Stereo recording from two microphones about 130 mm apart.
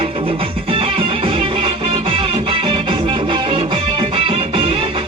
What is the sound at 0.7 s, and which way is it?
Music, 45° right (ahead or behind).